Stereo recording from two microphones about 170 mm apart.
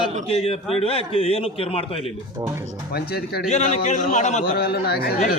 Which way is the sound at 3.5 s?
40° left (ahead or behind).